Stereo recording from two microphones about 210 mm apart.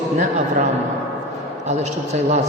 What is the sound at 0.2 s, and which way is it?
Speech, 35° right (ahead or behind).